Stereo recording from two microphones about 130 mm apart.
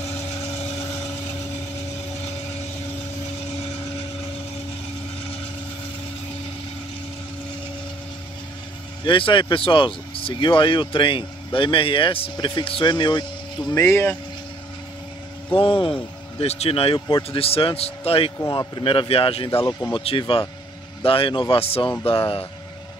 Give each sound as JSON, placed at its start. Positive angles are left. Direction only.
{"t": 0.0, "sound": "vehicle", "side_deg": 50}
{"t": 9.0, "sound": "speech", "side_deg": 40}
{"t": 13.8, "sound": "speech", "side_deg": 20}
{"t": 15.5, "sound": "speech", "side_deg": 40}
{"t": 18.4, "sound": "speech", "side_deg": 35}